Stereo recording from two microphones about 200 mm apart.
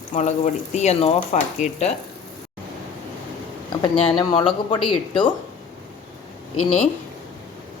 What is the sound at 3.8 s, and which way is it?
Speech, 25° left (ahead or behind).